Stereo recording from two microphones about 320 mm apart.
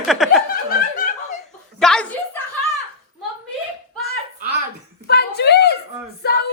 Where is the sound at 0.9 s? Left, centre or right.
Left.